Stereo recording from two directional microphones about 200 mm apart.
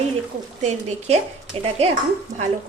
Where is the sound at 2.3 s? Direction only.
40° right (ahead or behind).